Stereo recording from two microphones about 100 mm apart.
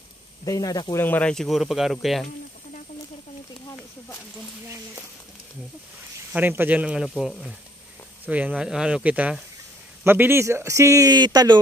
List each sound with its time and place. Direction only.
0.5 s speech: 40° left (ahead or behind)
0.9 s speech: 20° left (ahead or behind)
1.3 s speech: centre (ahead or behind)
6.3 s speech: 20° right (ahead or behind)
11.1 s speech: 45° right (ahead or behind)